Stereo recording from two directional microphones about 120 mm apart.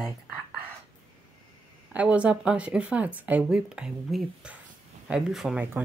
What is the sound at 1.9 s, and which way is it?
A woman's voice, 10° right (ahead or behind).